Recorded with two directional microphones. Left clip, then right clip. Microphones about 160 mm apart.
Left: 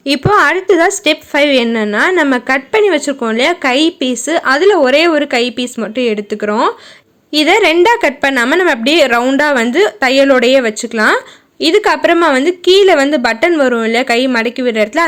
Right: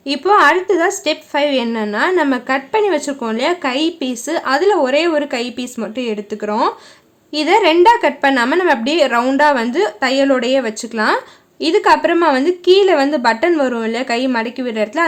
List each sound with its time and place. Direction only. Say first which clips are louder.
0.0 s a woman's voice: left 1 dB; 30° left (ahead or behind)